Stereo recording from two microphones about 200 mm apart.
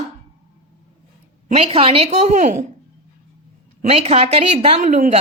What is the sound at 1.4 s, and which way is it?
A woman's voice, 30° right (ahead or behind).